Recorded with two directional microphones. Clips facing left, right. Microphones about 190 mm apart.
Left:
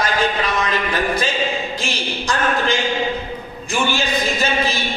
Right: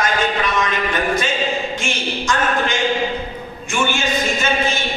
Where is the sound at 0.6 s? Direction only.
35° left (ahead or behind).